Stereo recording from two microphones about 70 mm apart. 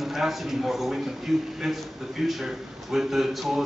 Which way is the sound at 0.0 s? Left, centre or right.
Centre.